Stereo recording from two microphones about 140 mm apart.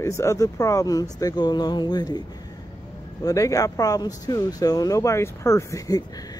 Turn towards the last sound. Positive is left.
turn(degrees=20)  # may be behind; listen again after turning